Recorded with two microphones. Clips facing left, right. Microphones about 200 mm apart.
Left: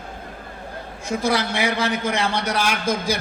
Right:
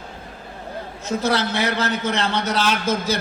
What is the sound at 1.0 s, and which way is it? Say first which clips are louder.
A man's voice: even; 10° left (ahead or behind).